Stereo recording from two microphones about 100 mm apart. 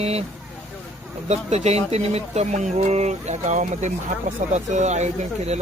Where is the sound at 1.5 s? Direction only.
90° right.